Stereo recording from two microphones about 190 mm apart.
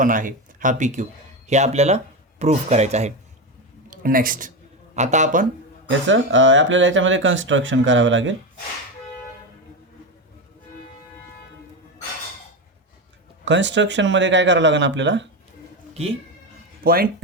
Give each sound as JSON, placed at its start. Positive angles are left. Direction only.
{"t": 0.0, "sound": "speech", "side_deg": -45}
{"t": 3.8, "sound": "speech", "side_deg": -45}
{"t": 6.1, "sound": "speech", "side_deg": -85}
{"t": 13.4, "sound": "speech", "side_deg": -70}
{"t": 16.8, "sound": "speech", "side_deg": -50}